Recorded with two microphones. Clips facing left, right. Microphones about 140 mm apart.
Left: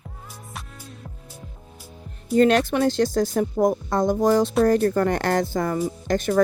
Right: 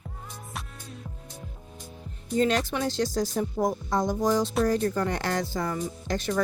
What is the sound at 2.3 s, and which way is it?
Speech, 65° left (ahead or behind).